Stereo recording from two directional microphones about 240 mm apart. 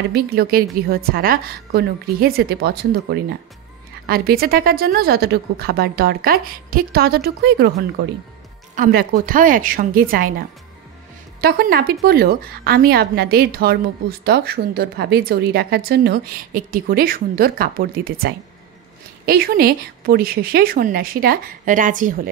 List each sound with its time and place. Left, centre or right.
0.1 s a woman's voice: right
8.7 s a woman's voice: right
11.4 s a woman's voice: right